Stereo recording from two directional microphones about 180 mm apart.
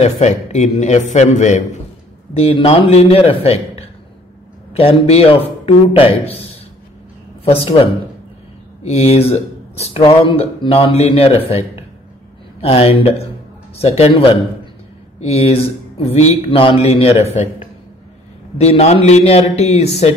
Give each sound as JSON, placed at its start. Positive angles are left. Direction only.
{"t": 0.0, "sound": "speech", "side_deg": 40}
{"t": 7.4, "sound": "speech", "side_deg": 30}